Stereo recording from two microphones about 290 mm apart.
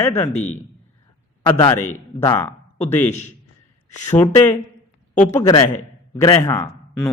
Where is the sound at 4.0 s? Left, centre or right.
Centre.